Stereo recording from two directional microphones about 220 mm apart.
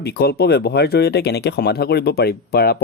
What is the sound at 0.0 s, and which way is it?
Speech, 45° left (ahead or behind).